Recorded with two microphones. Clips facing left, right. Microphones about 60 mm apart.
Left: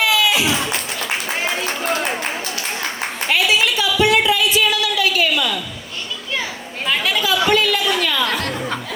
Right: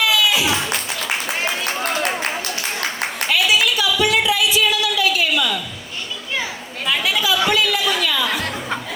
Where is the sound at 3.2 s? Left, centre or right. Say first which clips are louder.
Left 1 dB; left.